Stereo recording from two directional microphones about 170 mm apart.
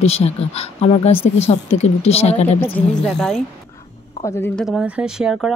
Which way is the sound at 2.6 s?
15° left (ahead or behind).